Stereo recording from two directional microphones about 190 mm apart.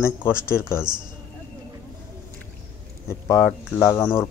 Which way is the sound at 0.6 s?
15° left (ahead or behind).